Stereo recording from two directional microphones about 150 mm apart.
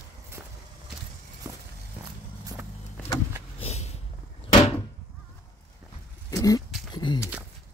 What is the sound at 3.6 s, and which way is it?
Vehicle, 45° left (ahead or behind).